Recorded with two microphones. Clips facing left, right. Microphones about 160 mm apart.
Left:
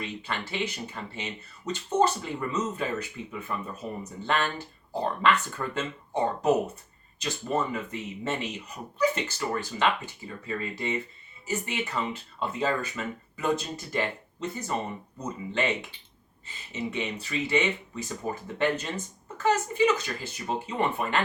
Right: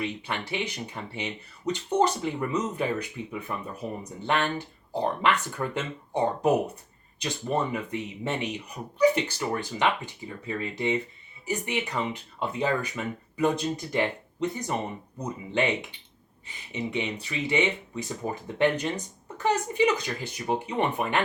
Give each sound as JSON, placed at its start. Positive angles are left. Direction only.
{"t": 0.0, "sound": "speech", "side_deg": -15}
{"t": 7.2, "sound": "speech", "side_deg": -15}